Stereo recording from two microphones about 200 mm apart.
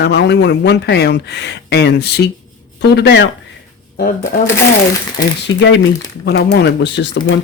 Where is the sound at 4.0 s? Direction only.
45° left (ahead or behind).